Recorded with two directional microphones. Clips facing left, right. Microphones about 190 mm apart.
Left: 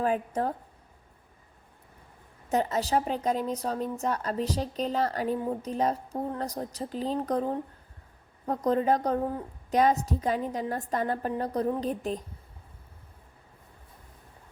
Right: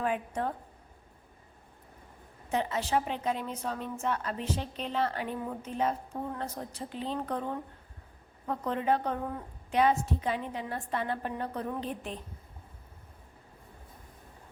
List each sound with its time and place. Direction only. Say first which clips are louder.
0.0 s a woman's voice: left 4 dB; 40° left (ahead or behind)
2.5 s a woman's voice: left 3 dB; 40° left (ahead or behind)